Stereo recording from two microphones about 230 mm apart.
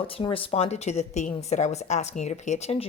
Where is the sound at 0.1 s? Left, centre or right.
Left.